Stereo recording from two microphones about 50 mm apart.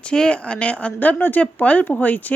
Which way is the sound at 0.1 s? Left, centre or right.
Centre.